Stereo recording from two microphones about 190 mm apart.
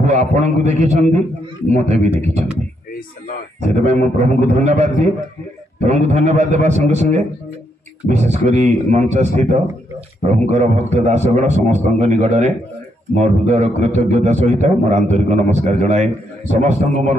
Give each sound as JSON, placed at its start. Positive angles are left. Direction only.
{"t": 0.0, "sound": "a man's voice", "side_deg": -40}
{"t": 3.6, "sound": "a man's voice", "side_deg": -35}
{"t": 5.9, "sound": "a man's voice", "side_deg": -35}